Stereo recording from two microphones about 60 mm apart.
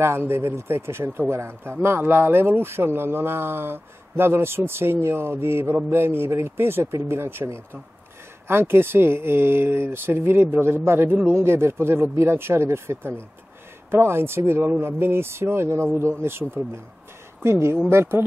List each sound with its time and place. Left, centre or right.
0.0 s speech: right
8.5 s speech: right